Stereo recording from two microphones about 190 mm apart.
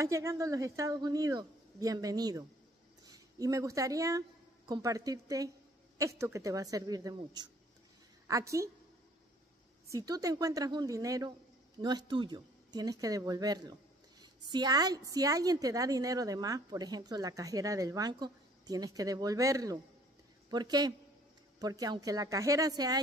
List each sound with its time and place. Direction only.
0.0 s a woman's voice: 15° right (ahead or behind)
9.8 s a woman's voice: 20° right (ahead or behind)